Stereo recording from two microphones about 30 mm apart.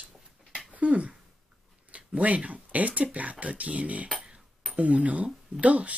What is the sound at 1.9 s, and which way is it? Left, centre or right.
Speech, right.